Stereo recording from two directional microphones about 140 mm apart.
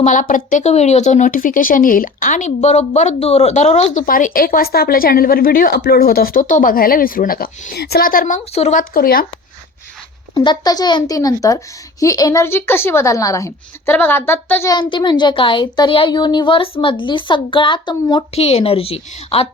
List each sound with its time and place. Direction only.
0.0 s speech: 65° left (ahead or behind); by 3.9 s 50° left (ahead or behind)
3.9 s a woman's voice: 80° left
8.7 s a woman's voice: 90° left
10.3 s speech: 30° left (ahead or behind); by 14.7 s 15° left (ahead or behind)
14.7 s a child's voice: 35° left (ahead or behind)
18.3 s a woman's voice: 45° left (ahead or behind)